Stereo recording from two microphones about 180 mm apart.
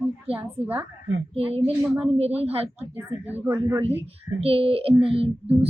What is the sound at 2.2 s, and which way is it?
Speech, 35° right (ahead or behind).